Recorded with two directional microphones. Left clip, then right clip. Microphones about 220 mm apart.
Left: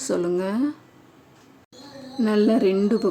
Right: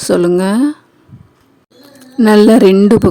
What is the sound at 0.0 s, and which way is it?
Speech, 40° right (ahead or behind).